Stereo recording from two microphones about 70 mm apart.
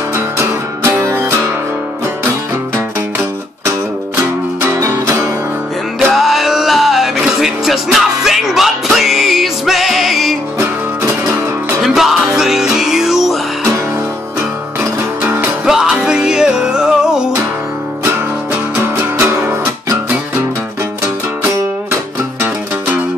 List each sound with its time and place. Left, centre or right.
0.1 s music: right
4.7 s music: right
5.9 s music: centre
11.8 s music: centre
14.8 s music: right
15.6 s music: centre
19.1 s music: right